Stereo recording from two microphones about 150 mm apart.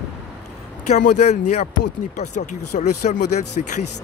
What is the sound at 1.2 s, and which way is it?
Speech, 50° left (ahead or behind).